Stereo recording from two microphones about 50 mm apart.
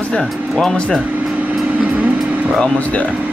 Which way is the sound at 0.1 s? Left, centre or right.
Centre.